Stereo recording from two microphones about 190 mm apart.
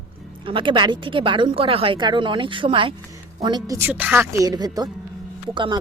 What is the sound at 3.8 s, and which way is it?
Speech, 10° right (ahead or behind).